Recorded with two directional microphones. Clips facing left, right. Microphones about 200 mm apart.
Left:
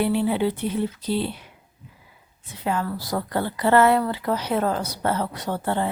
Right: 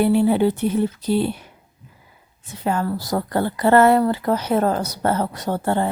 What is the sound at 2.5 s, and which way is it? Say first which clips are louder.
A woman's voice: right 4 dB; 45° right (ahead or behind).